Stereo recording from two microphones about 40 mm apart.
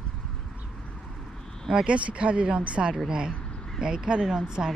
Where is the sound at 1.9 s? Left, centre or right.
Right.